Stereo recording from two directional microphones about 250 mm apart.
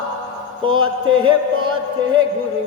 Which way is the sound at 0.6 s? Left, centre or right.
Right.